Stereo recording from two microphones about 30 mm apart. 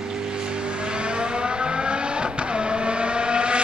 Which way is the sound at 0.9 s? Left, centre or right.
Right.